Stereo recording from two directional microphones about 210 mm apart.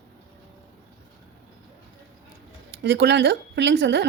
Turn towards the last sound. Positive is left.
turn(degrees=-55)  # may be behind; listen again after turning